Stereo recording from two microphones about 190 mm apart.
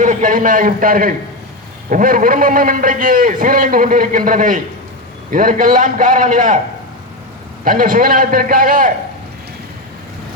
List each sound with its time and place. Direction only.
0.0 s a man's voice: 45° right (ahead or behind)
7.6 s a man's voice: 45° right (ahead or behind)